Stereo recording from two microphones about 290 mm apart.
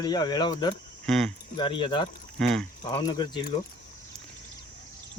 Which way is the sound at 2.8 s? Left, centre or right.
Centre.